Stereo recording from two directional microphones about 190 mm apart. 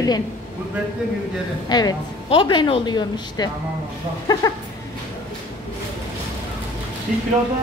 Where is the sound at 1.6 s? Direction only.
20° left (ahead or behind).